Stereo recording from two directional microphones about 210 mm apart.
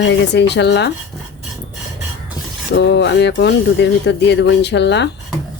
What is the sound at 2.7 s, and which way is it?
Speech, 55° left (ahead or behind).